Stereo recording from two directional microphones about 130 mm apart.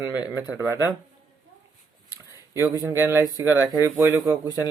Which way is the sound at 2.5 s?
20° right (ahead or behind).